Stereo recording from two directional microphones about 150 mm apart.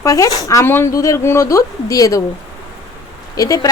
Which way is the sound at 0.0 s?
20° left (ahead or behind).